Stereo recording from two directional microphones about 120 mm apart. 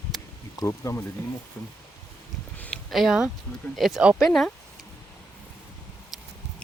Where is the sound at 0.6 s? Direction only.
25° left (ahead or behind).